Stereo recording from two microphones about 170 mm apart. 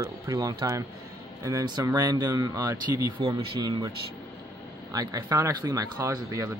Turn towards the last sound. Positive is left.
turn(degrees=-20)  # may be behind; listen again after turning